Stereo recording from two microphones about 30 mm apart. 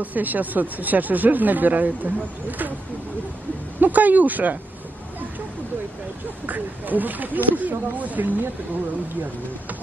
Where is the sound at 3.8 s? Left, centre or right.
Right.